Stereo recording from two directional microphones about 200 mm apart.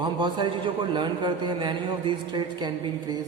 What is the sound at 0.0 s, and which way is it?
A man's voice, 25° right (ahead or behind).